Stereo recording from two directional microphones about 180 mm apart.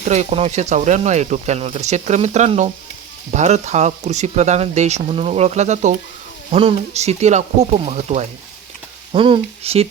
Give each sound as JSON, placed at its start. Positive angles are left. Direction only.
{"t": 0.0, "sound": "speech", "side_deg": -40}